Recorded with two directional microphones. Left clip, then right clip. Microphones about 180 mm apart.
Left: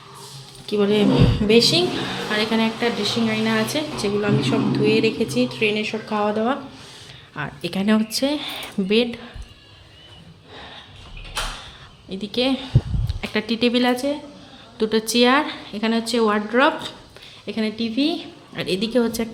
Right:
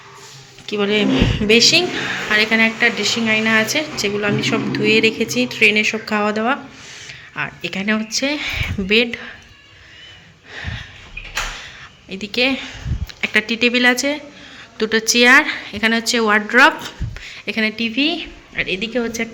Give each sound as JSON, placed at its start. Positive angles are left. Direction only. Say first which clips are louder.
{"t": 0.6, "sound": "speech", "louder": "right 1 dB", "side_deg": 10}
{"t": 7.1, "sound": "speech", "louder": "right 6 dB", "side_deg": 15}
{"t": 10.5, "sound": "a sound", "louder": "right 8 dB", "side_deg": 10}
{"t": 12.0, "sound": "speech", "louder": "right 4 dB", "side_deg": 5}
{"t": 18.5, "sound": "a woman's voice", "louder": "right 1 dB", "side_deg": 30}